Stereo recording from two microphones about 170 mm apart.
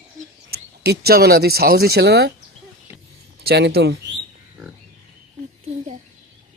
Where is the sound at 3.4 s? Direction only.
70° right (ahead or behind).